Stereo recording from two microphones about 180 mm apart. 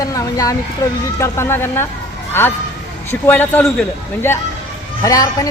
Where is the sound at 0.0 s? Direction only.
20° left (ahead or behind).